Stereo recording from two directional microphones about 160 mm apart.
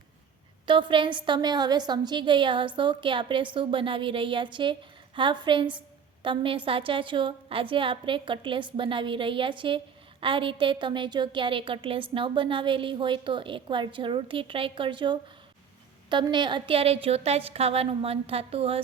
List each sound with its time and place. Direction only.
0.6 s a woman's voice: 30° right (ahead or behind)